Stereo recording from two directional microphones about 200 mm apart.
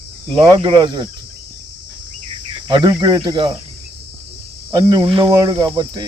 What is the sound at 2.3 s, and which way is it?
Cricket, 20° right (ahead or behind).